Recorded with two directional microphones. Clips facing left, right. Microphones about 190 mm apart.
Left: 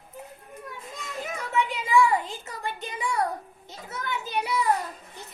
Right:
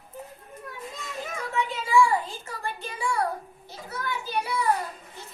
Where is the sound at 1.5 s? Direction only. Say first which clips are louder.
Even; 20° left (ahead or behind).